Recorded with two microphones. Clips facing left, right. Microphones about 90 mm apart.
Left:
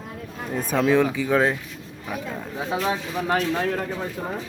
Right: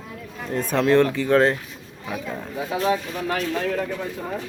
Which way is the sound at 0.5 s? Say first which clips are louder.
Right 2 dB; 5° left (ahead or behind).